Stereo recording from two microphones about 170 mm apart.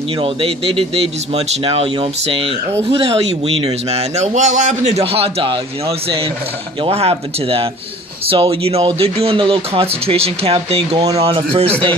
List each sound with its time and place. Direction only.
0.2 s a man's voice: 30° right (ahead or behind)